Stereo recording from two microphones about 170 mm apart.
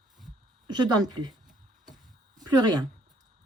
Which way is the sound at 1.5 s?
Centre (ahead or behind).